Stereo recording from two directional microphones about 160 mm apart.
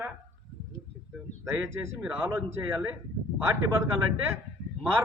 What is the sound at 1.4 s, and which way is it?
A man's voice, 15° right (ahead or behind).